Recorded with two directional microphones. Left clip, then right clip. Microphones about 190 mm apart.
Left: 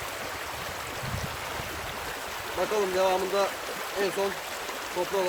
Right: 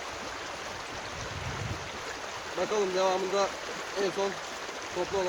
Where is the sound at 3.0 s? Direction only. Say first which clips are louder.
Left 2 dB; 5° left (ahead or behind).